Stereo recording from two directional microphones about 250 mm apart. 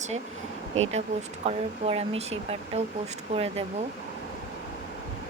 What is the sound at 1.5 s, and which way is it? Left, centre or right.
Speech, right.